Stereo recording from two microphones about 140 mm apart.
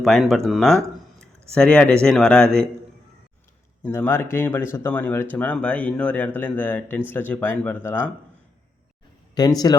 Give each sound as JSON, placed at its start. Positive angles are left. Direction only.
{"t": 0.0, "sound": "speech", "side_deg": 0}
{"t": 3.8, "sound": "speech", "side_deg": 15}
{"t": 9.3, "sound": "speech", "side_deg": 30}